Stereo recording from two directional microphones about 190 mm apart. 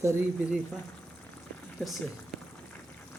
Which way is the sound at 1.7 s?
Centre (ahead or behind).